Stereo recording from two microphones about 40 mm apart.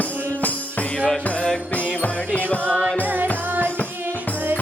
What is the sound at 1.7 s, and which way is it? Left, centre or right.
Music, left.